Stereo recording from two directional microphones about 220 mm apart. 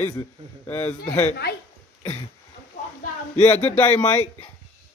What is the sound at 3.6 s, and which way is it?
Speech, 10° left (ahead or behind).